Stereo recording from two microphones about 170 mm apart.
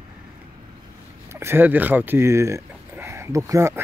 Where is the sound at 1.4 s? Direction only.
15° right (ahead or behind).